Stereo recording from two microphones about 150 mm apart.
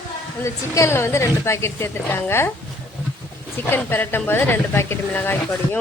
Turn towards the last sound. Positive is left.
turn(degrees=10)  # may be behind; listen again after turning